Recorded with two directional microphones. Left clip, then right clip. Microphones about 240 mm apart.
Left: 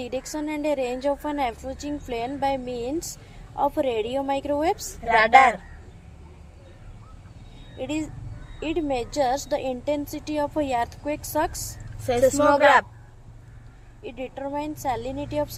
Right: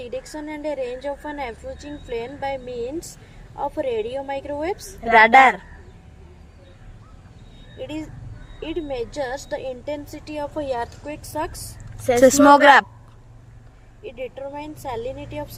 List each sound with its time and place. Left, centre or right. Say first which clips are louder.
0.0 s a woman's voice: left 1 dB; left
5.1 s speech: right 4 dB; right
7.8 s a woman's voice: left 2 dB; left
12.2 s speech: right 6 dB; right
14.0 s a woman's voice: right 1 dB; left